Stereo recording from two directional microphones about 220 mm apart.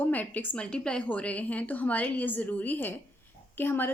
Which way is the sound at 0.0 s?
5° left (ahead or behind).